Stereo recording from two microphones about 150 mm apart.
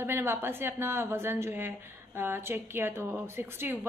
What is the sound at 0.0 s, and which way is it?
A woman's voice, 15° right (ahead or behind).